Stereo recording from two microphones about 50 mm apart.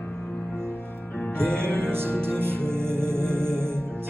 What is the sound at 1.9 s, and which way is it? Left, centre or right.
Music, right.